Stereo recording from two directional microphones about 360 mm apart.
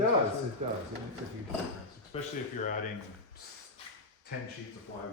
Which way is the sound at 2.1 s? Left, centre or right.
Centre.